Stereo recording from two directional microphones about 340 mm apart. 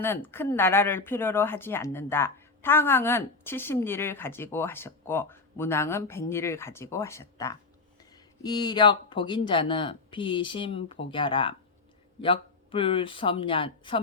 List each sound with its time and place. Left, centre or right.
0.0 s speech: centre